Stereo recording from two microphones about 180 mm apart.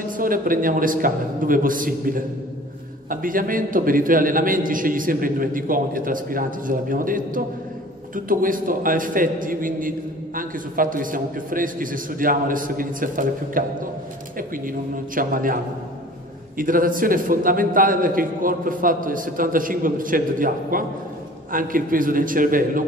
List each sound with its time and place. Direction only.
0.2 s a man's voice: 50° right (ahead or behind)